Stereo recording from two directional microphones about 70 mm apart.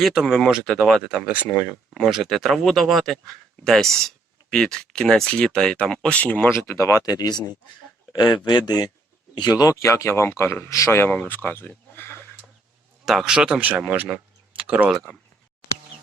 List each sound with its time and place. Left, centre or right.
0.0 s speech: centre
1.2 s speech: centre
1.9 s speech: centre; by 6.5 s left
6.5 s speech: left
8.4 s speech: left
9.4 s speech: left
9.8 s speech: left
10.7 s speech: left
10.9 s speech: left
13.1 s speech: centre
13.6 s speech: right
14.1 s a sound: centre